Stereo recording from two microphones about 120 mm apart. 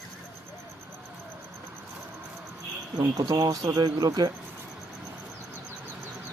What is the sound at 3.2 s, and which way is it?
Speech, 30° right (ahead or behind).